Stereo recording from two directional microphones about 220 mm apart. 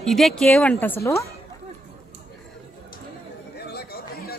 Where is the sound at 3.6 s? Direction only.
45° left (ahead or behind).